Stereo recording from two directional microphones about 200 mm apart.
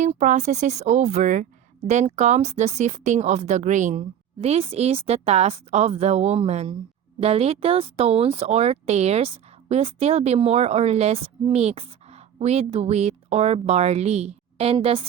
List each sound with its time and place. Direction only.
0.0 s speech: 40° right (ahead or behind)